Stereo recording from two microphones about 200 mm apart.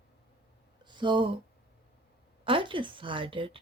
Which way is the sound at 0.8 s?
25° right (ahead or behind).